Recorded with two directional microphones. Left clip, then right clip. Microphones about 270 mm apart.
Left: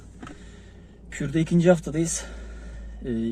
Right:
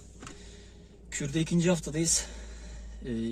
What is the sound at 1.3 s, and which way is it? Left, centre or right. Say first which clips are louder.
Speech: left 9 dB; centre.